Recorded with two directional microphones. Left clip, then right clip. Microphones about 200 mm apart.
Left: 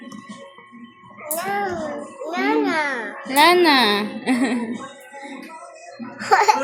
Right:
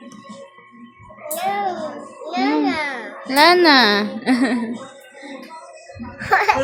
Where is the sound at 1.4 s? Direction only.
Centre (ahead or behind).